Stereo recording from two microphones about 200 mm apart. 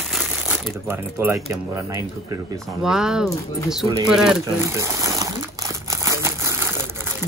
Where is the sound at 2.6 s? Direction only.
5° right (ahead or behind).